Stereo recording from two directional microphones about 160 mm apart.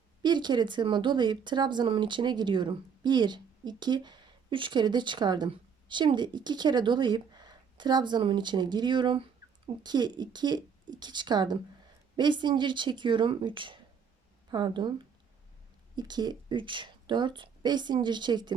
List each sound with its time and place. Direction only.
0.2 s speech: 25° right (ahead or behind)